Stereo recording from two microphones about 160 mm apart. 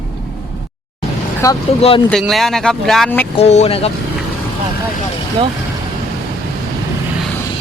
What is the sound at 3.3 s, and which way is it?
Speech, 40° left (ahead or behind).